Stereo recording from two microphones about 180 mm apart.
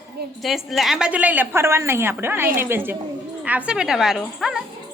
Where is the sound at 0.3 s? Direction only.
Centre (ahead or behind).